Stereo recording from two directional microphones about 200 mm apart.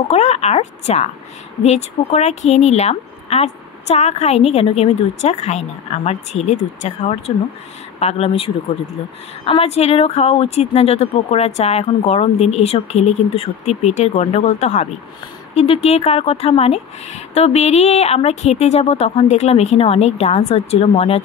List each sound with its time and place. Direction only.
0.1 s speech: 35° left (ahead or behind)